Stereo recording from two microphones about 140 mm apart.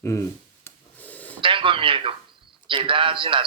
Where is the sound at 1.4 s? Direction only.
40° right (ahead or behind).